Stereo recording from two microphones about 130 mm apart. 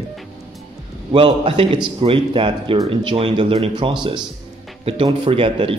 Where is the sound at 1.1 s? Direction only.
40° right (ahead or behind).